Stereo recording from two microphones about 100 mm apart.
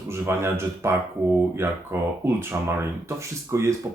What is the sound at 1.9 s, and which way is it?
Speech, 25° right (ahead or behind).